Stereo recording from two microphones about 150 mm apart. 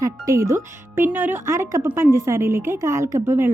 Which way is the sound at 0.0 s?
20° right (ahead or behind).